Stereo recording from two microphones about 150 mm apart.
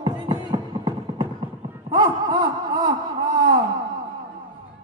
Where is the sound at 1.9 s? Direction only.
30° right (ahead or behind).